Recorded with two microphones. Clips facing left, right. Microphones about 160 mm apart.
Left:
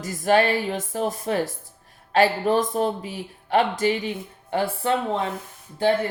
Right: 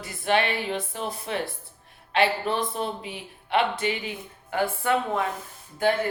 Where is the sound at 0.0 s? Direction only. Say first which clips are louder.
Left 5 dB; 40° left (ahead or behind).